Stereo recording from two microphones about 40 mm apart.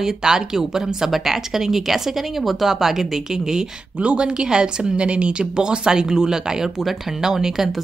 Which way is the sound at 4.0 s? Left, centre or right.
Right.